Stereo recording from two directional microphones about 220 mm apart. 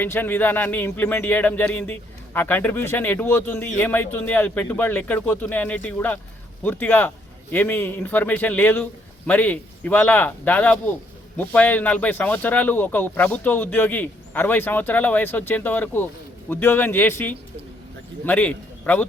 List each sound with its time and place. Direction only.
0.0 s a man's voice: 10° left (ahead or behind)